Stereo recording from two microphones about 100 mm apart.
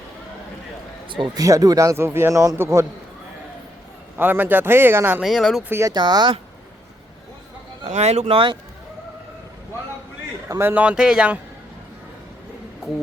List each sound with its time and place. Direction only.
1.0 s speech: 55° right (ahead or behind)
1.4 s speech: 35° right (ahead or behind)
4.2 s speech: 20° right (ahead or behind)
5.2 s speech: centre (ahead or behind)
5.6 s speech: 25° right (ahead or behind)
5.9 s speech: 45° right (ahead or behind)
7.9 s speech: 90° right; by 8.5 s 65° right (ahead or behind)
10.6 s speech: 20° right (ahead or behind)
10.8 s speech: 10° right (ahead or behind)